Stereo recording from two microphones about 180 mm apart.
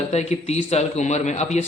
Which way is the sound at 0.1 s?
35° left (ahead or behind).